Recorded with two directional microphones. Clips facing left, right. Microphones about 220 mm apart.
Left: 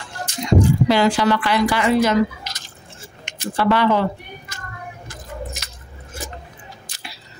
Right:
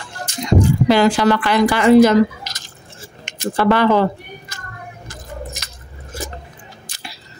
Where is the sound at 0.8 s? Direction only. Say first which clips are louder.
Right 3 dB; 50° right (ahead or behind).